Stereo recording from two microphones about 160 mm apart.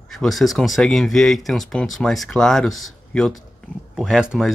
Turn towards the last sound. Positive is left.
turn(degrees=-5)  # may be behind; listen again after turning